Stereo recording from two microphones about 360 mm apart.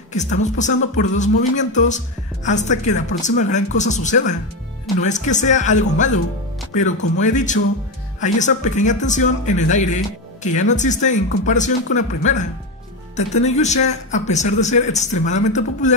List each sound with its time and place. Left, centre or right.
0.1 s speech: centre